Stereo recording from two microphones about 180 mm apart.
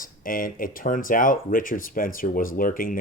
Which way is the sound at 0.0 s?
50° left (ahead or behind).